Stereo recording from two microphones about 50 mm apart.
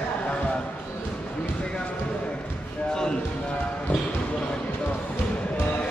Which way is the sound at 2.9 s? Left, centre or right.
Centre.